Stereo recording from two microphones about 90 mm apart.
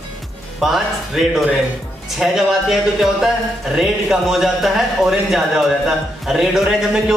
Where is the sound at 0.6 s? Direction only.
Centre (ahead or behind).